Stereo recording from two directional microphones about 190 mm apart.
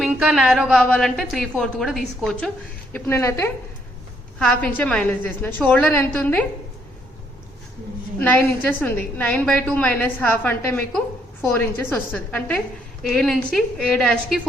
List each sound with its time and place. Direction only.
0.0 s a woman's voice: centre (ahead or behind)
8.2 s a woman's voice: 10° left (ahead or behind)